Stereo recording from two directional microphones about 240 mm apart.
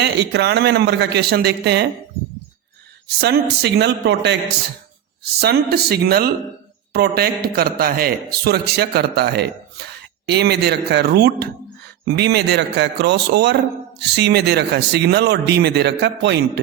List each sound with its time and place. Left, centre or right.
0.0 s speech: right
3.2 s speech: right
5.4 s a man's voice: right